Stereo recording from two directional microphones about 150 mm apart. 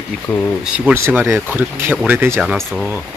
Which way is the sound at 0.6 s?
5° right (ahead or behind).